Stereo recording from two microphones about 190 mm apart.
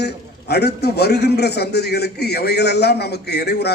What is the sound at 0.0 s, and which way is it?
A man's voice, 60° left (ahead or behind).